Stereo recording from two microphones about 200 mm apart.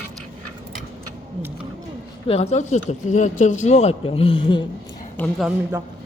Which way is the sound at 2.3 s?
30° left (ahead or behind).